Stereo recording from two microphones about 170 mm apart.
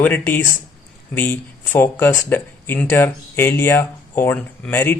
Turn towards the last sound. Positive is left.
turn(degrees=10)  # may be behind; listen again after turning